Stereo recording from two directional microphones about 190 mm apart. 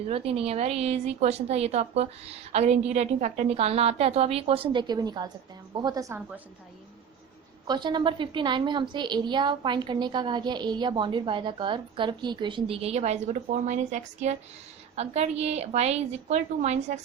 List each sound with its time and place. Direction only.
0.1 s a woman's voice: 30° right (ahead or behind); by 6.4 s 10° right (ahead or behind)
7.7 s a woman's voice: 25° right (ahead or behind)